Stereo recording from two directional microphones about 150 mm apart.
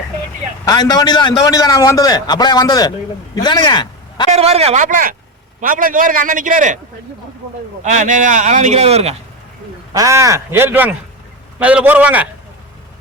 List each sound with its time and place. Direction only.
0.6 s a man's voice: 25° left (ahead or behind)
4.3 s a man's voice: 45° right (ahead or behind); by 6.7 s 60° right (ahead or behind)
7.9 s speech: 55° right (ahead or behind)
9.9 s a man's voice: 20° right (ahead or behind)